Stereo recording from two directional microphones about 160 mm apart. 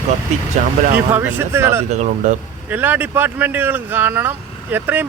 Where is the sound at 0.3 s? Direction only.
45° right (ahead or behind).